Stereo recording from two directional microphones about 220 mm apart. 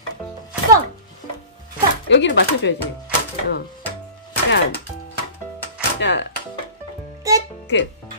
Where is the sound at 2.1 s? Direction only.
55° left (ahead or behind).